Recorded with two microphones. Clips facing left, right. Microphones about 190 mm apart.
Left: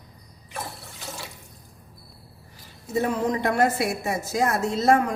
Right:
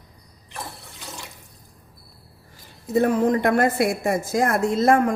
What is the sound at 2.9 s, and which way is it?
A woman's voice, 55° right (ahead or behind).